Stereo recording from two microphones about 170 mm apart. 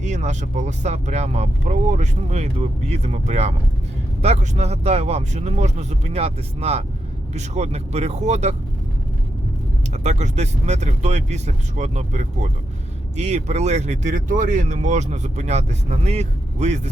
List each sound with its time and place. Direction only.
0.0 s speech: 40° right (ahead or behind)
9.9 s speech: 40° right (ahead or behind)